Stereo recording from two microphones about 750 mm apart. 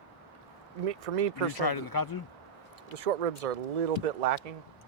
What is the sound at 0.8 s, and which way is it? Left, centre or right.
Speech, right.